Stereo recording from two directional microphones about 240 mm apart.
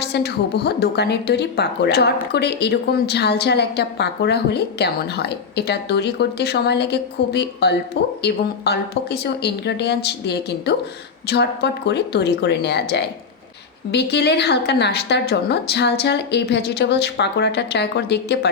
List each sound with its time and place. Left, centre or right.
0.0 s a woman's voice: left